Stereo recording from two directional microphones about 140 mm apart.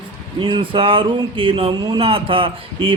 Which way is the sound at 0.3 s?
35° right (ahead or behind).